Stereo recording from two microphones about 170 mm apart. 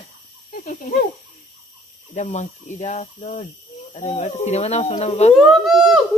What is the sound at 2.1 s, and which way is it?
Speech, 45° left (ahead or behind).